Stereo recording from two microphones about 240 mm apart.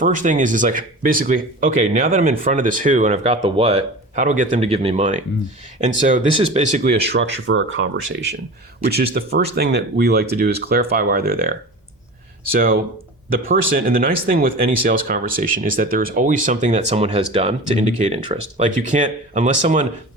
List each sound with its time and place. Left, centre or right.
0.0 s speech: right
7.0 s speech: right